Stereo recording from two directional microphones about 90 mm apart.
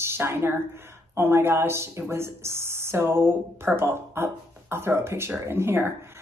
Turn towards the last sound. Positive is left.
turn(degrees=-25)  # may be behind; listen again after turning